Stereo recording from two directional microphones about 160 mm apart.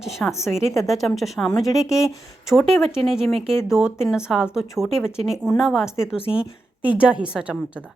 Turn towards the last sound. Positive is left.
turn(degrees=-5)  # may be behind; listen again after turning